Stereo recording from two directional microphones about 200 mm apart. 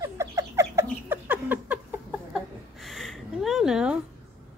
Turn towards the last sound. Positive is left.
turn(degrees=-5)  # may be behind; listen again after turning